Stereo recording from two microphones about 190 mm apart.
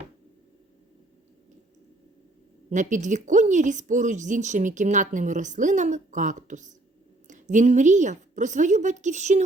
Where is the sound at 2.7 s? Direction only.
40° right (ahead or behind).